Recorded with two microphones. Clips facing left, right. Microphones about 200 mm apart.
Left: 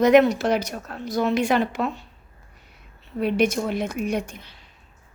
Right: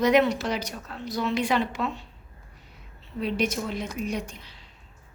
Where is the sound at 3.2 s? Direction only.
55° left (ahead or behind).